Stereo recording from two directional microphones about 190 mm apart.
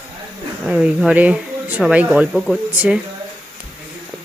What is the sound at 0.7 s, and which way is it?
Speech, 5° right (ahead or behind).